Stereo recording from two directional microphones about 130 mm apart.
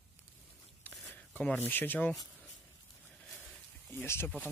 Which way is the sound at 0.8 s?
15° left (ahead or behind).